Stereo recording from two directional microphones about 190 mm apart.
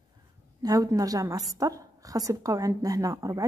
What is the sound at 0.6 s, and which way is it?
A woman's voice, 20° right (ahead or behind).